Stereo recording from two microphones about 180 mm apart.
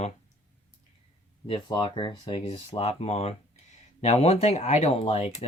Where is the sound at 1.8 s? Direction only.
25° left (ahead or behind).